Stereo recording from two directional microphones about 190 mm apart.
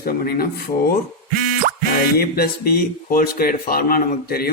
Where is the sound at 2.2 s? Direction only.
50° left (ahead or behind).